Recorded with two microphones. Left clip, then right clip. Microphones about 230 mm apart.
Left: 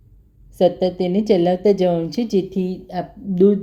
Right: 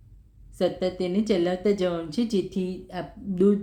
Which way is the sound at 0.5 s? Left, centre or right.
Centre.